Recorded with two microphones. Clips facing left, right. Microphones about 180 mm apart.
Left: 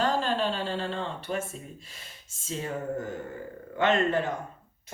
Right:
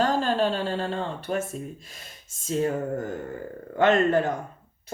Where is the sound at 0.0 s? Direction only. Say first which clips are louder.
Right 4 dB; 40° right (ahead or behind).